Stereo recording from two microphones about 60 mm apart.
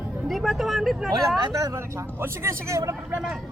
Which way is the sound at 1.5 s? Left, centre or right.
Right.